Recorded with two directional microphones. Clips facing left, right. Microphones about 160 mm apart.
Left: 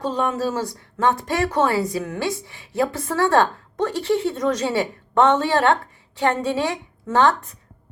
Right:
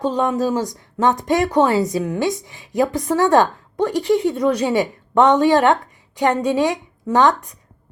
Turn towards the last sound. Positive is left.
turn(degrees=-15)  # may be behind; listen again after turning